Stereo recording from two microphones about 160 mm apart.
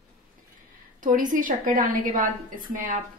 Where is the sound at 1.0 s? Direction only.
55° right (ahead or behind).